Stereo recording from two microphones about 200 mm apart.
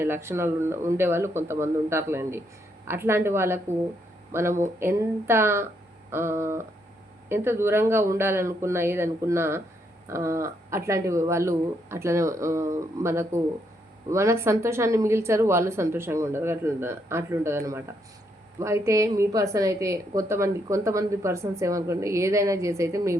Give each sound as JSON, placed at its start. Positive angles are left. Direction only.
{"t": 0.0, "sound": "a woman's voice", "side_deg": -10}